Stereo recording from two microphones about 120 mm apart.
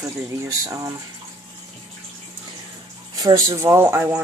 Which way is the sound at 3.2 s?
30° right (ahead or behind).